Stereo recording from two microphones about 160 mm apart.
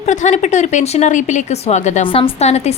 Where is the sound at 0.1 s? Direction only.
50° left (ahead or behind).